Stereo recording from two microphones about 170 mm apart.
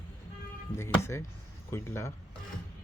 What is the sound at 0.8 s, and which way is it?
Speech, 15° left (ahead or behind).